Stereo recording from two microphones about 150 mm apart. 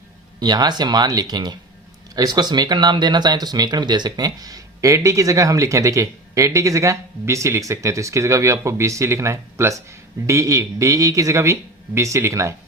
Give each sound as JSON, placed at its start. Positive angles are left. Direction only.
{"t": 0.3, "sound": "speech", "side_deg": -25}